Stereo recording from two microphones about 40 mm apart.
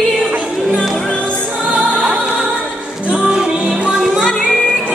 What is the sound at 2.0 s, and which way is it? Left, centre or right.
Music, right.